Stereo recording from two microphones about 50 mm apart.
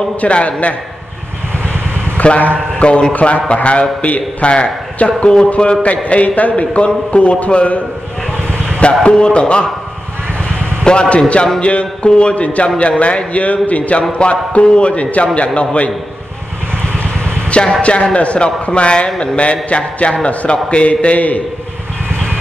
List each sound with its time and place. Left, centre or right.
0.2 s a man's voice: left
2.1 s a man's voice: left
8.5 s vehicle: left
9.0 s a man's voice: centre
10.8 s a man's voice: centre
17.5 s a man's voice: left